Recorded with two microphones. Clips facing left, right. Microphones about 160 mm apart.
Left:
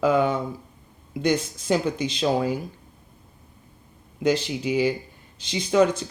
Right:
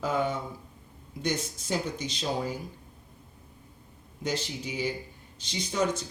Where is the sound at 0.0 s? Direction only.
90° left.